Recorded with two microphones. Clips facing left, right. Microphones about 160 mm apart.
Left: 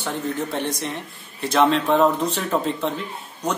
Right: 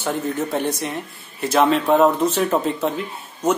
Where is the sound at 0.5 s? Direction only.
5° right (ahead or behind).